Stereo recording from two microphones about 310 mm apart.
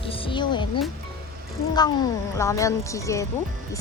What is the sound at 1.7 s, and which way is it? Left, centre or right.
Speech, centre.